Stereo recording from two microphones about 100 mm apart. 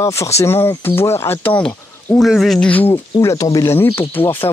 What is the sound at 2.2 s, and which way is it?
Speech, centre (ahead or behind).